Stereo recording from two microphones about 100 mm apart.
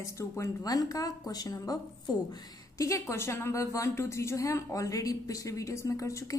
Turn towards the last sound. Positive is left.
turn(degrees=35)  # may be behind; listen again after turning